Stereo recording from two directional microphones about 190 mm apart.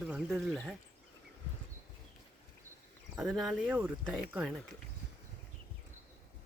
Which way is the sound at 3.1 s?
Centre (ahead or behind).